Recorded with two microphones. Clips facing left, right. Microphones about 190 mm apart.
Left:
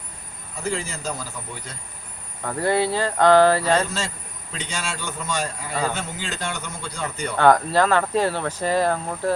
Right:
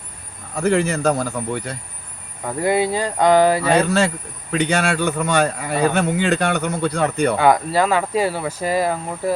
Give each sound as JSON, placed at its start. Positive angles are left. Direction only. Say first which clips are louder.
{"t": 0.5, "sound": "a man's voice", "louder": "right 10 dB", "side_deg": -65}
{"t": 2.4, "sound": "speech", "louder": "right 3 dB", "side_deg": -10}
{"t": 3.7, "sound": "a man's voice", "louder": "right 6 dB", "side_deg": -65}
{"t": 7.3, "sound": "speech", "louder": "left 3 dB", "side_deg": -10}